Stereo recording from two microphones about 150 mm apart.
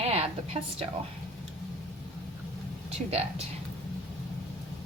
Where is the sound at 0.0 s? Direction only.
45° right (ahead or behind).